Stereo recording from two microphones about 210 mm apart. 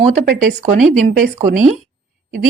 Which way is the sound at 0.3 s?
40° right (ahead or behind).